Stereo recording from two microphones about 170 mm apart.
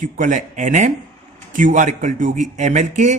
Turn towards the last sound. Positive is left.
turn(degrees=-45)  # may be behind; listen again after turning